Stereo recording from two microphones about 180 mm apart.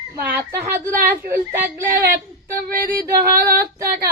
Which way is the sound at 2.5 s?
55° right (ahead or behind).